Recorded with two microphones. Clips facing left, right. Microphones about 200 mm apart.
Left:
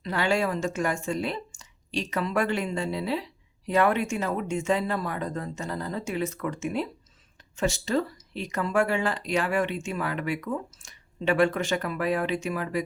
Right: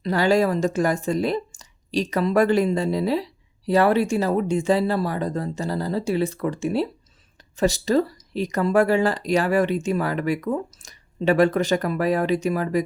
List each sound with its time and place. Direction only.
0.0 s speech: 40° right (ahead or behind)